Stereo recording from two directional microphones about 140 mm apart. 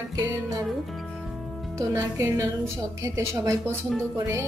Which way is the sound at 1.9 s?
20° right (ahead or behind).